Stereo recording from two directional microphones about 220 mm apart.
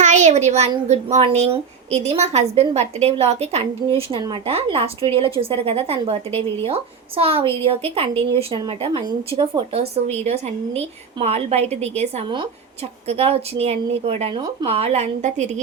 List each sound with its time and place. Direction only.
0.0 s a woman's voice: 35° right (ahead or behind)